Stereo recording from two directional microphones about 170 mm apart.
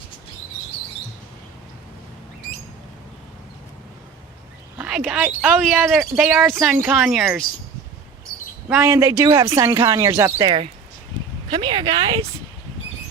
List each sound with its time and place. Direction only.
4.8 s speech: 5° right (ahead or behind)
8.7 s speech: 15° right (ahead or behind)
11.5 s speech: 30° right (ahead or behind)